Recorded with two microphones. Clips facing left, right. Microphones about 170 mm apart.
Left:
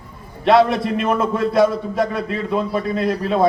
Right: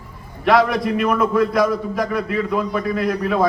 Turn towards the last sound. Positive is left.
turn(degrees=25)  # may be behind; listen again after turning